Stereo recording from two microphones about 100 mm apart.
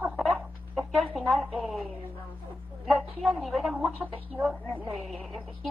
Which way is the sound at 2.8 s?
Centre (ahead or behind).